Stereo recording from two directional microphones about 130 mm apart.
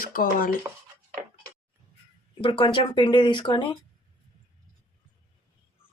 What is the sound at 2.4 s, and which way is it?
Speech, 40° left (ahead or behind).